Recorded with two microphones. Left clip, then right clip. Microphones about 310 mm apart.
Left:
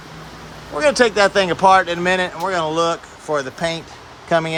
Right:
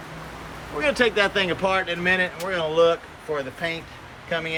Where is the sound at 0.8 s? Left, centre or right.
Centre.